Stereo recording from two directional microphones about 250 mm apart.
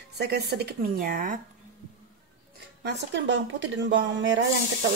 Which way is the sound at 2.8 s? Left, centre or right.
Right.